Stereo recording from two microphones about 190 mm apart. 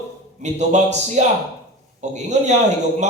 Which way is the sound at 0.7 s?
35° right (ahead or behind).